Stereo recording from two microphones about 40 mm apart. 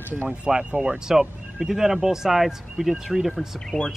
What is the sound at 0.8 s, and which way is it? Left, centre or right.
Speech, centre.